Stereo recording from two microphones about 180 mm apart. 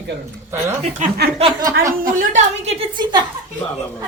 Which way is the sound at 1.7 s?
50° right (ahead or behind).